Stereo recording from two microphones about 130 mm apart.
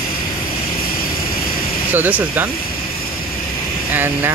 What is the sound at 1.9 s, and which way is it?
Speech, 15° right (ahead or behind).